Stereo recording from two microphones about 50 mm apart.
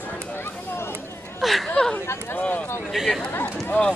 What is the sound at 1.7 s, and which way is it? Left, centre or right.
Speech, centre.